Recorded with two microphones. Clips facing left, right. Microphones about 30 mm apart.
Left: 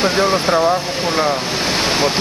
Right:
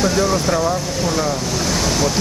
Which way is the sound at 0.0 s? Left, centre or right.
Left.